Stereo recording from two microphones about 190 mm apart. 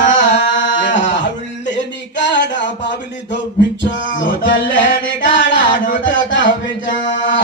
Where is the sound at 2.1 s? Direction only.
70° left (ahead or behind).